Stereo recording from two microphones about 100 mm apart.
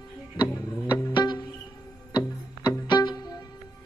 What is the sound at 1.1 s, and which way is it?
Music, 50° left (ahead or behind).